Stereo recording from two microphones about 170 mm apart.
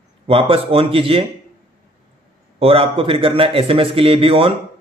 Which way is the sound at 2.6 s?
35° right (ahead or behind).